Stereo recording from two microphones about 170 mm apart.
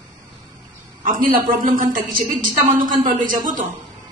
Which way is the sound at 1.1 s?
55° right (ahead or behind).